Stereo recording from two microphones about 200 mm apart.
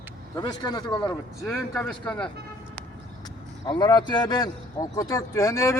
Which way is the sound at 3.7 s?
20° left (ahead or behind).